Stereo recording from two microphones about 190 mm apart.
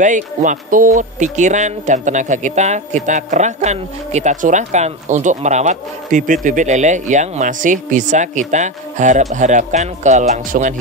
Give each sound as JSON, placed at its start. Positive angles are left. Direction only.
{"t": 0.0, "sound": "speech", "side_deg": -40}